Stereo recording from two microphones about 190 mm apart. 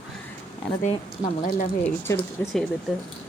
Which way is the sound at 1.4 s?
50° left (ahead or behind).